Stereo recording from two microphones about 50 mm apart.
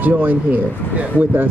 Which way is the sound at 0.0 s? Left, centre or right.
Right.